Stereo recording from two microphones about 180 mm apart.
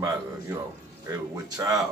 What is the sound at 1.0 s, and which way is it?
Speech, 20° right (ahead or behind).